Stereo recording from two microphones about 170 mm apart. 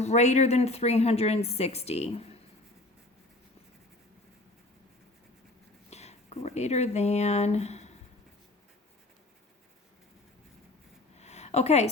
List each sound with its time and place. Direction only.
0.0 s a woman's voice: 40° left (ahead or behind)
5.9 s speech: 40° left (ahead or behind)
11.2 s a sound: 40° left (ahead or behind)